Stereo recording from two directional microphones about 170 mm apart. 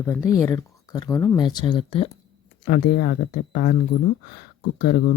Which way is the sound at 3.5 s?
55° left (ahead or behind).